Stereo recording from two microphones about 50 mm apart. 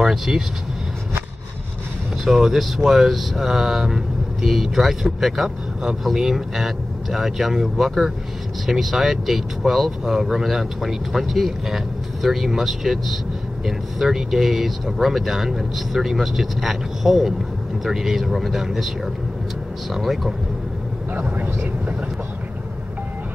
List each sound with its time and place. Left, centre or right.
0.0 s speech: centre
2.2 s speech: centre
19.9 s speech: centre
21.1 s speech: right